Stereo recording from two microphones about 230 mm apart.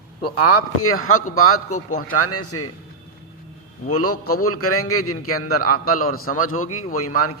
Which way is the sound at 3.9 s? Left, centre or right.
Left.